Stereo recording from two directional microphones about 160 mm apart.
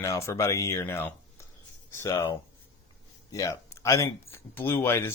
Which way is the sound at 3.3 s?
20° left (ahead or behind).